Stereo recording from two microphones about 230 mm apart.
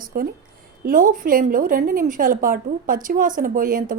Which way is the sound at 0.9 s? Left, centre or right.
Right.